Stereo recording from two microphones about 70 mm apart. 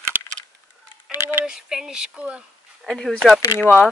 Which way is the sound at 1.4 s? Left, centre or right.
Centre.